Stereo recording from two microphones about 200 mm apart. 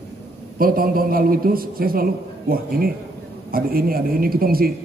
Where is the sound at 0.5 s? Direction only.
45° right (ahead or behind).